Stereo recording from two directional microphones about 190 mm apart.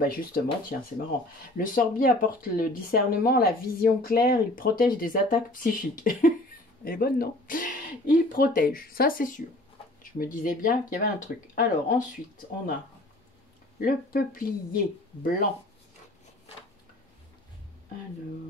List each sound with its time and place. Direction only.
0.0 s speech: 50° left (ahead or behind)
13.7 s speech: 50° left (ahead or behind)